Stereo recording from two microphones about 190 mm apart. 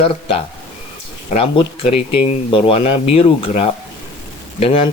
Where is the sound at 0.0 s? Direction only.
30° left (ahead or behind).